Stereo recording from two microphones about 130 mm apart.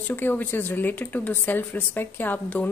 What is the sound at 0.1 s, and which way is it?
Speech, 15° left (ahead or behind).